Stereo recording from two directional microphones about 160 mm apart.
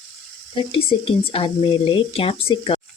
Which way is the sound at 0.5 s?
35° left (ahead or behind).